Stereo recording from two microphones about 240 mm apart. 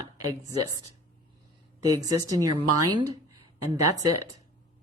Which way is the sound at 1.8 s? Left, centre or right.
Centre.